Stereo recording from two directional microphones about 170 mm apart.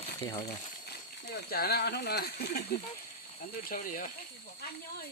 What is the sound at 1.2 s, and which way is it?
Speech, 65° left (ahead or behind).